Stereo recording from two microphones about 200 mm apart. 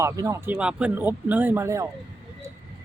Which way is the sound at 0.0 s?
15° right (ahead or behind).